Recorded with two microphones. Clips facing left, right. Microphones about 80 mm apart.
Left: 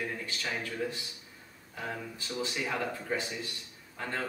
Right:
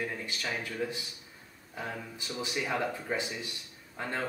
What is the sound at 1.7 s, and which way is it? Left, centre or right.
Speech, centre.